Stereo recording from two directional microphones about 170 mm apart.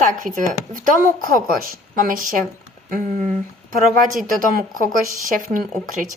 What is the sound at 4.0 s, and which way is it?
Speech, 55° right (ahead or behind).